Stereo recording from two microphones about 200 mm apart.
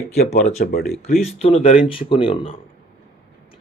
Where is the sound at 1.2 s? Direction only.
30° left (ahead or behind).